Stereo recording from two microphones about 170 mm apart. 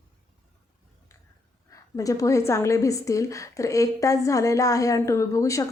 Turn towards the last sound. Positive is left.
turn(degrees=20)  # may be behind; listen again after turning